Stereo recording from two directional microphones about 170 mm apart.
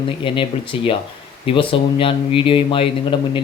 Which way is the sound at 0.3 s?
30° left (ahead or behind).